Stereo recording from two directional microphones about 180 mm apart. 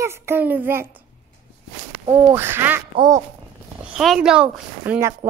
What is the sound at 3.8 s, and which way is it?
Speech, centre (ahead or behind).